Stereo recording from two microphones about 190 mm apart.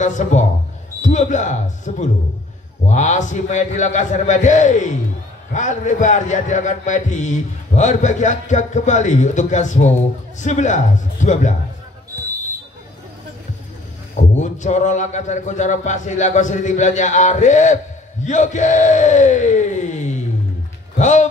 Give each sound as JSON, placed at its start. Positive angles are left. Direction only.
{"t": 0.0, "sound": "speech", "side_deg": 40}
{"t": 14.1, "sound": "speech", "side_deg": 40}